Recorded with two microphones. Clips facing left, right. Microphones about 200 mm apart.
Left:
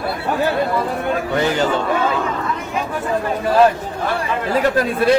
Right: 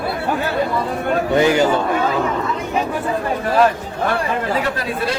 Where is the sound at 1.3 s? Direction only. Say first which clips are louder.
Right 5 dB; 15° right (ahead or behind).